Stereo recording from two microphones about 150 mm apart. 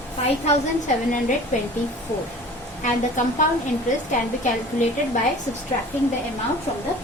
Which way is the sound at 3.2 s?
55° left (ahead or behind).